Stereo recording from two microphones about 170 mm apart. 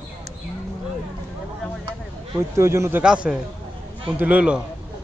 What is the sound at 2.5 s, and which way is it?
Speech, 15° right (ahead or behind).